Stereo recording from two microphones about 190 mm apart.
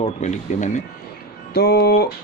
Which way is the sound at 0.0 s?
35° left (ahead or behind).